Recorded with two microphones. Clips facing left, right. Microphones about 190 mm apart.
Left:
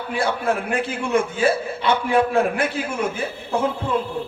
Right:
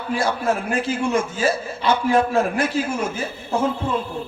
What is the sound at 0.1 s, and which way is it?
Speech, 60° left (ahead or behind).